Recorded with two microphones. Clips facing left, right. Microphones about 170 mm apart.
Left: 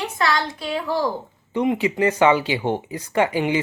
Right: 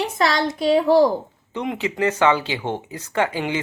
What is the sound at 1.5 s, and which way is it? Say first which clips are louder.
Speech: left 5 dB; 10° left (ahead or behind).